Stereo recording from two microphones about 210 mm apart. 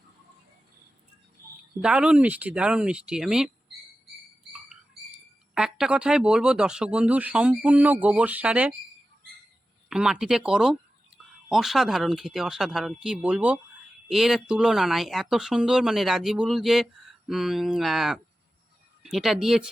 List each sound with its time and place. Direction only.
1.8 s speech: 5° right (ahead or behind)
4.5 s speech: 5° right (ahead or behind)
9.9 s speech: 5° right (ahead or behind)